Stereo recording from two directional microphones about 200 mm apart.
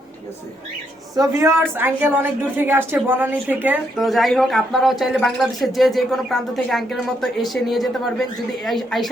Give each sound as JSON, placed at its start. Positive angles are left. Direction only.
{"t": 1.4, "sound": "speech", "side_deg": -10}